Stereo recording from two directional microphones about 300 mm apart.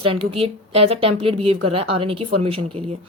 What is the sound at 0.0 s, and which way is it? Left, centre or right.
A woman's voice, centre.